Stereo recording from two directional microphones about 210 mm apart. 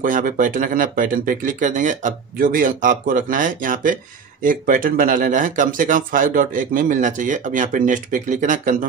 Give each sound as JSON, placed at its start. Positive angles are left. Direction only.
{"t": 0.0, "sound": "speech", "side_deg": -40}